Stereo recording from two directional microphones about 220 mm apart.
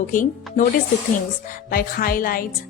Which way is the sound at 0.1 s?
35° left (ahead or behind).